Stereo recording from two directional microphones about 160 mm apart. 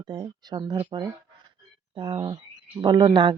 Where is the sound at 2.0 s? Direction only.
30° right (ahead or behind).